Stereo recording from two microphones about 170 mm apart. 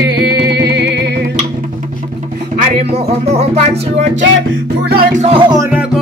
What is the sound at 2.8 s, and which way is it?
Music, 35° right (ahead or behind).